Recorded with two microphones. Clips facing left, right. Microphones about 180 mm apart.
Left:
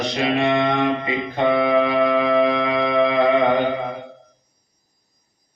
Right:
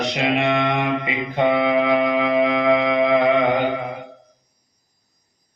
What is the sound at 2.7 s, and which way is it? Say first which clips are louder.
Music: right 2 dB; 15° right (ahead or behind).